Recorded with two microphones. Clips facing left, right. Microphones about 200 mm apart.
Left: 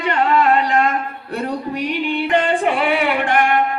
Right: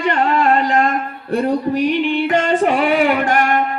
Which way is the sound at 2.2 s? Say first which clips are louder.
Even; 45° right (ahead or behind).